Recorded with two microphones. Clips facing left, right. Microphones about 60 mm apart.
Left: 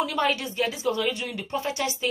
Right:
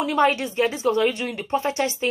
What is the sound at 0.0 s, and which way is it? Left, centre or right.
Speech, right.